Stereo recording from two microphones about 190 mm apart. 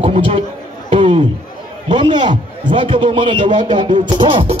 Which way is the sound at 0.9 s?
30° right (ahead or behind).